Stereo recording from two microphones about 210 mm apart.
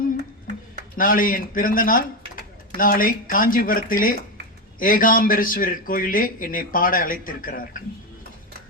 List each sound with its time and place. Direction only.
0.9 s a man's voice: 40° left (ahead or behind)